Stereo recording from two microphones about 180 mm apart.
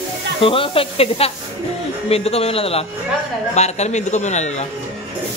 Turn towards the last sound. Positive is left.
turn(degrees=40)  # may be behind; listen again after turning